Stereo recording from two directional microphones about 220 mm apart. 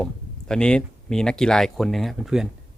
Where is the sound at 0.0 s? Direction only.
5° left (ahead or behind).